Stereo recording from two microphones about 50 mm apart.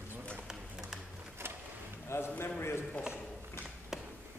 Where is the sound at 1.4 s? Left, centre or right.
Right.